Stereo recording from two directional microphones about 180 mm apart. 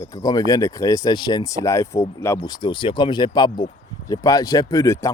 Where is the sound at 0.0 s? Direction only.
20° left (ahead or behind).